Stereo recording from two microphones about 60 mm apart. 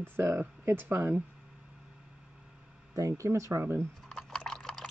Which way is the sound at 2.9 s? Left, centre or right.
Right.